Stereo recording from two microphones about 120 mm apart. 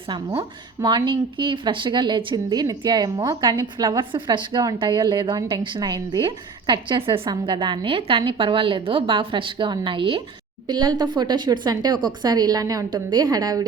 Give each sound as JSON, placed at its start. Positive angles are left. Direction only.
{"t": 0.8, "sound": "a woman's voice", "side_deg": -40}
{"t": 4.1, "sound": "a woman's voice", "side_deg": -45}